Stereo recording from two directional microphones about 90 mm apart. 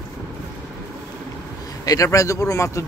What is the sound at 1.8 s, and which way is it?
Speech, 40° left (ahead or behind).